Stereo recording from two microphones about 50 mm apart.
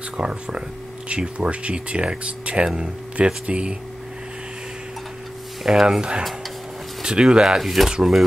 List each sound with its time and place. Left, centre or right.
0.2 s speech: right
5.6 s speech: centre
7.4 s speech: centre